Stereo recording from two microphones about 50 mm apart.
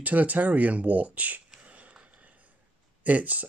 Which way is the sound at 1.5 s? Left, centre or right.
Right.